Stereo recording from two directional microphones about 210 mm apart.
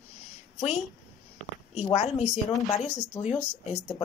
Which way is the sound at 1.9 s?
30° left (ahead or behind).